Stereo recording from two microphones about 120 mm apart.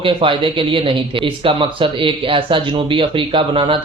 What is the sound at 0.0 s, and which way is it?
Speech, 45° right (ahead or behind).